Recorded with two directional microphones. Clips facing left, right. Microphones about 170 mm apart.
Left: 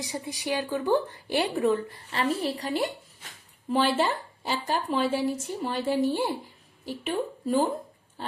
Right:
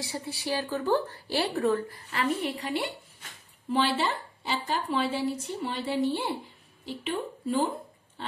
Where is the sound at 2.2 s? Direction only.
35° left (ahead or behind).